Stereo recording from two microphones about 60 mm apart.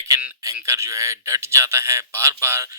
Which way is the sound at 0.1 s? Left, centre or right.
Right.